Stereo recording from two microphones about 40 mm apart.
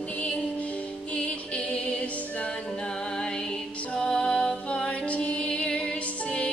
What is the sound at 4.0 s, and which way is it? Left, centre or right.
Music, centre.